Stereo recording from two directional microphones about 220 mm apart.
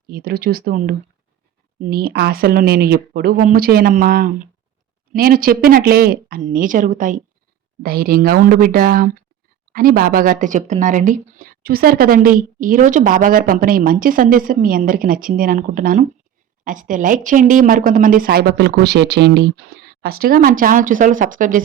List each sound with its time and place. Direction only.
0.1 s a woman's voice: 45° right (ahead or behind)